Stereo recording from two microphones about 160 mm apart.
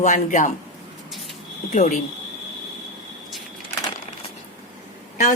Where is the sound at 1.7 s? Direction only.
45° left (ahead or behind).